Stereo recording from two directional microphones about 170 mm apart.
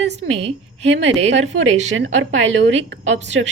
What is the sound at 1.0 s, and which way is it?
A woman's voice, 90° right.